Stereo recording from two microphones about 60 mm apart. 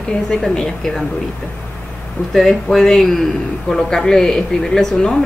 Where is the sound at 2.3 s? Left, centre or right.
Centre.